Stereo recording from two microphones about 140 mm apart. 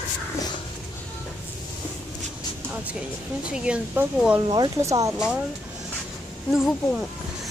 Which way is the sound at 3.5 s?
5° right (ahead or behind).